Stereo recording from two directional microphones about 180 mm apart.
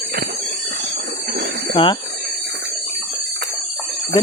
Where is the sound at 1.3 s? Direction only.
70° right (ahead or behind).